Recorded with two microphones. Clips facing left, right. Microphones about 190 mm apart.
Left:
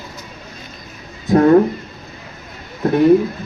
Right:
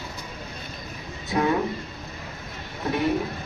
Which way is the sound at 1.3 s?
50° left (ahead or behind).